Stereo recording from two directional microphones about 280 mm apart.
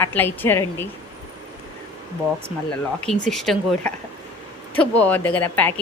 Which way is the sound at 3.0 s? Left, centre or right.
Centre.